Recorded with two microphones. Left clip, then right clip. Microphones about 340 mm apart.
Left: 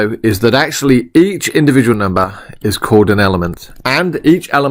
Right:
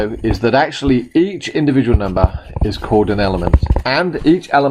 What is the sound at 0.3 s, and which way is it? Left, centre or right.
Speech, left.